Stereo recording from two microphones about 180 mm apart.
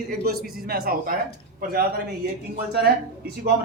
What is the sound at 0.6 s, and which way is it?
Speech, 55° right (ahead or behind).